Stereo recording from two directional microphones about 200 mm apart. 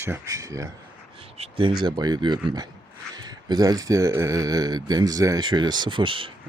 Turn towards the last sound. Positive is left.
turn(degrees=-25)  # may be behind; listen again after turning